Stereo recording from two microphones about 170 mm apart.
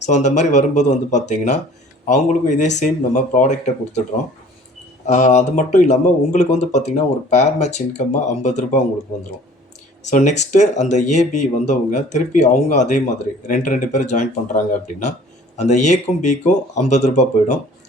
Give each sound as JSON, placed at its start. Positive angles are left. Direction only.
{"t": 0.0, "sound": "speech", "side_deg": 45}
{"t": 5.0, "sound": "speech", "side_deg": 45}
{"t": 10.0, "sound": "speech", "side_deg": 45}